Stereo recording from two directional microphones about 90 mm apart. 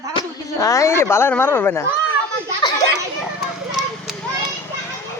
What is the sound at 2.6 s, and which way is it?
Children playing, 55° left (ahead or behind).